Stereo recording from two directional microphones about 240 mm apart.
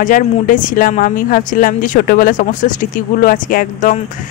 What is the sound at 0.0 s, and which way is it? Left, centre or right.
A woman's voice, left.